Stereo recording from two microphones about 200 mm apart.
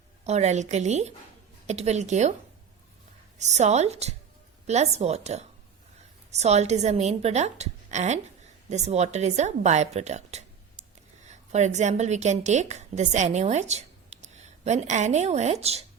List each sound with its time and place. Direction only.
0.3 s a woman's voice: 35° right (ahead or behind)
3.3 s a woman's voice: 35° right (ahead or behind)